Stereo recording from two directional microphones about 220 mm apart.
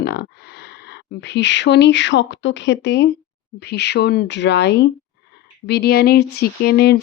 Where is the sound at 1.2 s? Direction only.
55° left (ahead or behind).